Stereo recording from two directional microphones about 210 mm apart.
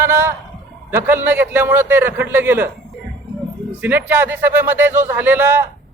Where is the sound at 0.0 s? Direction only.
15° right (ahead or behind).